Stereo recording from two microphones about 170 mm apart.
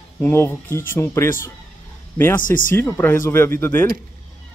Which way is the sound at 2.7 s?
10° left (ahead or behind).